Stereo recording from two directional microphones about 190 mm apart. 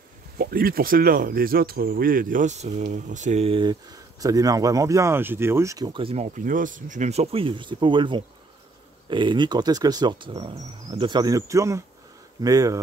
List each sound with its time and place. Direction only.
0.4 s speech: 50° right (ahead or behind); by 3.7 s 30° right (ahead or behind)
4.2 s speech: 20° right (ahead or behind)